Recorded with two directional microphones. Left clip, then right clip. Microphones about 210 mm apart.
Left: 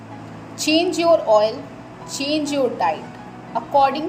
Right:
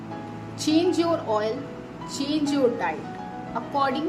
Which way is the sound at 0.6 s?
10° right (ahead or behind).